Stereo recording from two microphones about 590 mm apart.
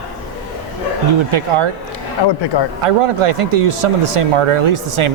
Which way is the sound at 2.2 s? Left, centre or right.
Left.